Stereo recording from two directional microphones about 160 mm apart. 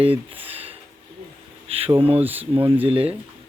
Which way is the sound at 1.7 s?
35° right (ahead or behind).